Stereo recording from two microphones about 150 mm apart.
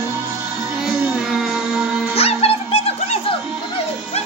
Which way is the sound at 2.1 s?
40° left (ahead or behind).